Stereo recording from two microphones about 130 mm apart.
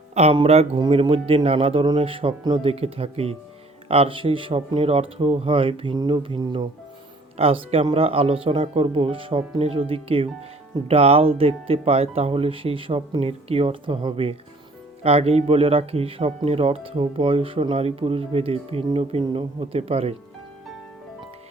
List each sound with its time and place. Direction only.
0.1 s speech: 55° right (ahead or behind)
0.8 s speech: 45° right (ahead or behind)
2.6 s speech: 50° right (ahead or behind)